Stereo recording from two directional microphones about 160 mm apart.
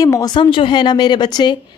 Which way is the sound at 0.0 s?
20° left (ahead or behind).